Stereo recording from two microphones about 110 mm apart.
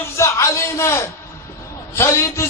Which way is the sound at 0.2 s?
25° left (ahead or behind).